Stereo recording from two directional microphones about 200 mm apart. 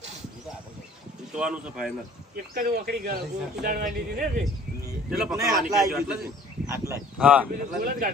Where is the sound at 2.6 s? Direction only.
50° right (ahead or behind).